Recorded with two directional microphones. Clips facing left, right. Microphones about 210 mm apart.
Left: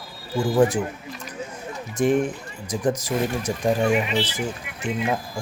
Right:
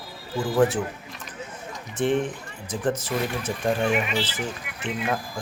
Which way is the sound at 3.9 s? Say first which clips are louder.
Left 3 dB; 25° left (ahead or behind).